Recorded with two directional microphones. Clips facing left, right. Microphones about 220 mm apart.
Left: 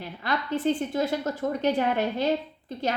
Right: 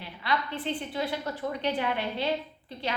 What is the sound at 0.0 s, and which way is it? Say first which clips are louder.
A woman's voice: left 1 dB; 45° left (ahead or behind).